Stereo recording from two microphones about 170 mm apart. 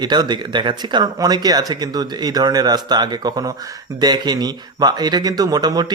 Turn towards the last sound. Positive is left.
turn(degrees=-25)  # may be behind; listen again after turning